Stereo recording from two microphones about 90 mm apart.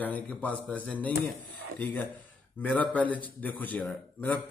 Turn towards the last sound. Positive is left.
turn(degrees=20)  # may be behind; listen again after turning